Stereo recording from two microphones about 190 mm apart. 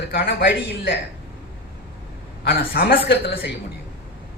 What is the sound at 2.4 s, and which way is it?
Speech, 50° left (ahead or behind).